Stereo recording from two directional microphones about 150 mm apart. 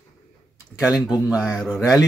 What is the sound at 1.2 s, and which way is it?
Speech, 5° right (ahead or behind).